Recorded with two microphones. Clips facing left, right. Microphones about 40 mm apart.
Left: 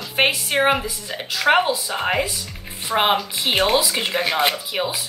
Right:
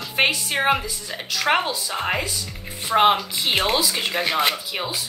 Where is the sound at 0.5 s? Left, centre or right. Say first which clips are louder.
Left 4 dB; centre.